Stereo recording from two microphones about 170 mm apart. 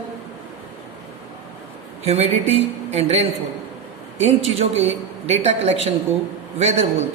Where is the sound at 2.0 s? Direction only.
35° right (ahead or behind).